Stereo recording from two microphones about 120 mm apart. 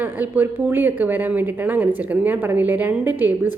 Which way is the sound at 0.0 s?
15° right (ahead or behind).